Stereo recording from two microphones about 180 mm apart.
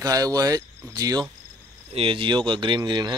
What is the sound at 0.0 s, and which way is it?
Speech, 20° right (ahead or behind).